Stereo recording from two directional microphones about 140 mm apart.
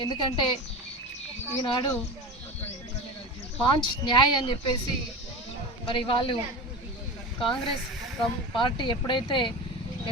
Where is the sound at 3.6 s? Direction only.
35° left (ahead or behind).